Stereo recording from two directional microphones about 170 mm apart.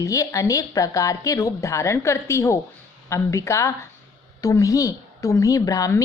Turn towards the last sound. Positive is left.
turn(degrees=20)  # may be behind; listen again after turning